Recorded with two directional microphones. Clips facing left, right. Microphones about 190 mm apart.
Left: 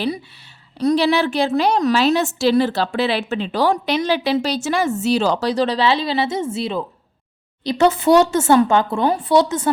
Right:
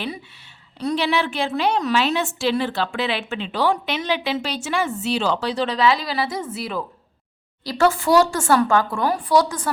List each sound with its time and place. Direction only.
0.8 s a woman's voice: 40° left (ahead or behind); by 9.6 s 25° left (ahead or behind)